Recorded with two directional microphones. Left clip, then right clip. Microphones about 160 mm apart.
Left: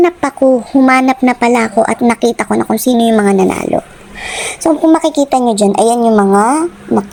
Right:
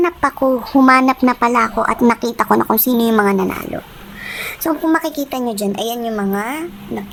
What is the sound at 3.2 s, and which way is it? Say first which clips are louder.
A woman's voice: left 6 dB; 20° left (ahead or behind).